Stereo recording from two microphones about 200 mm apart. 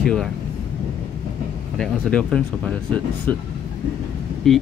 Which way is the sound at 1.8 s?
5° left (ahead or behind).